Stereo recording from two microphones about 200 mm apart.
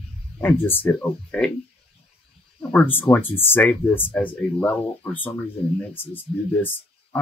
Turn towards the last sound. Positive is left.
turn(degrees=10)  # may be behind; listen again after turning